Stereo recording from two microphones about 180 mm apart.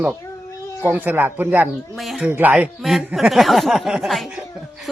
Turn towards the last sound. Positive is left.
turn(degrees=-5)  # may be behind; listen again after turning